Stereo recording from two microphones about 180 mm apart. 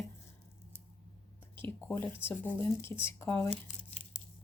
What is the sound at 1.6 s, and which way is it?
Speech, 10° left (ahead or behind).